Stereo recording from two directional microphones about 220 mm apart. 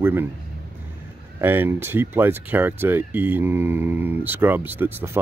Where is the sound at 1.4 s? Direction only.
10° right (ahead or behind).